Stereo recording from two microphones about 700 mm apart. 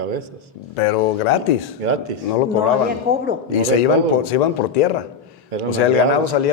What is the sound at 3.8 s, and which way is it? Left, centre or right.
A man's voice, left.